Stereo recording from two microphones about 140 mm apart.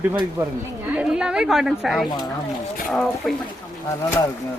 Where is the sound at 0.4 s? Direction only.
15° right (ahead or behind).